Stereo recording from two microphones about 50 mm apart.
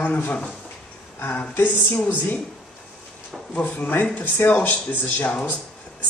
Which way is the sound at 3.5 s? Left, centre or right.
Left.